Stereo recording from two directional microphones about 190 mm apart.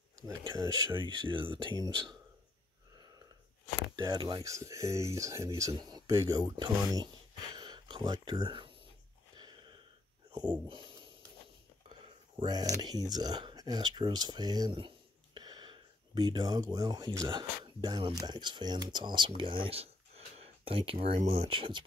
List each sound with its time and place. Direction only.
0.4 s speech: 20° right (ahead or behind)
3.9 s speech: 20° right (ahead or behind)
7.5 s a sound: 25° right (ahead or behind)
9.4 s wheeze: 25° right (ahead or behind)
10.7 s speech: 25° right (ahead or behind)
12.4 s speech: 20° right (ahead or behind)